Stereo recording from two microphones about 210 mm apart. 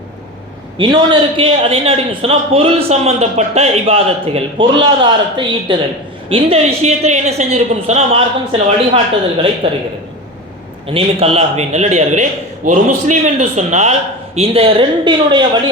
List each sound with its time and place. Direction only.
0.8 s a man's voice: 25° right (ahead or behind)
10.9 s a man's voice: 30° right (ahead or behind)